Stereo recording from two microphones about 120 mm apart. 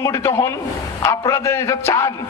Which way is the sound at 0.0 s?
20° left (ahead or behind).